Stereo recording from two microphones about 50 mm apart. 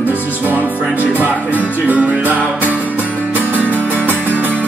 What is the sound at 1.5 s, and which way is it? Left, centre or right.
Music, left.